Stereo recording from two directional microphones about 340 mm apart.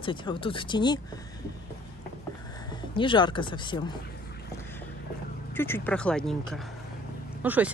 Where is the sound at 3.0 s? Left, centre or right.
Centre.